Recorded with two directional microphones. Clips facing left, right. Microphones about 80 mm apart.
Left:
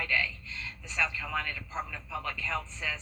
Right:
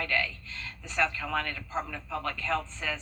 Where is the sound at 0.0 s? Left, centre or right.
Right.